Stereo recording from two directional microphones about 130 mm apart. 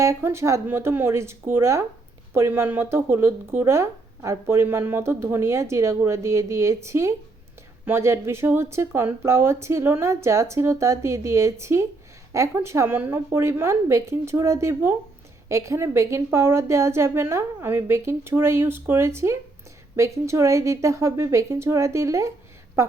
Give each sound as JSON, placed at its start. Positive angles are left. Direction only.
{"t": 0.0, "sound": "speech", "side_deg": -20}